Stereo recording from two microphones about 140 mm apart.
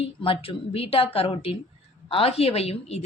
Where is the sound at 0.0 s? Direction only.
40° left (ahead or behind).